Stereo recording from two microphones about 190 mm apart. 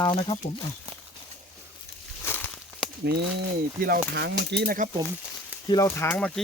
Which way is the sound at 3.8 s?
55° right (ahead or behind).